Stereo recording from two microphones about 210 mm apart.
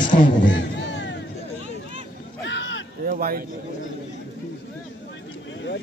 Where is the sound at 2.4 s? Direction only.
60° left (ahead or behind).